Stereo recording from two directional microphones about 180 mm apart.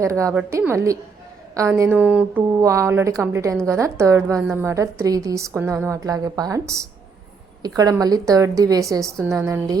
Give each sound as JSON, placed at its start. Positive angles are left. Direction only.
{"t": 0.0, "sound": "a woman's voice", "side_deg": -15}